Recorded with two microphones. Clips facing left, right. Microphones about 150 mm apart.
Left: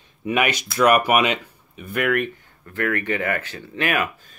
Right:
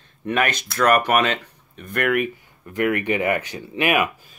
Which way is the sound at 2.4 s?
15° right (ahead or behind).